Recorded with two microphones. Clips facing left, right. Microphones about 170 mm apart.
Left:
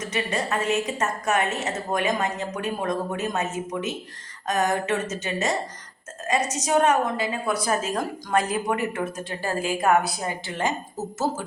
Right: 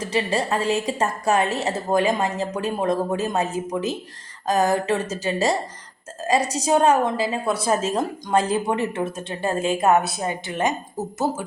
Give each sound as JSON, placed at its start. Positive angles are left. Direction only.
{"t": 0.0, "sound": "a woman's voice", "side_deg": -30}